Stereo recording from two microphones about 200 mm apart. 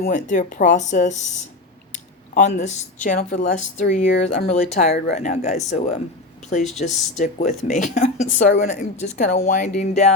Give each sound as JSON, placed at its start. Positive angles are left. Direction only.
{"t": 0.0, "sound": "speech", "side_deg": 40}